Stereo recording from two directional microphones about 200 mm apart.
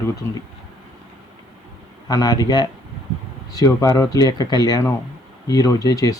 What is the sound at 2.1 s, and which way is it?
Speech, 20° left (ahead or behind).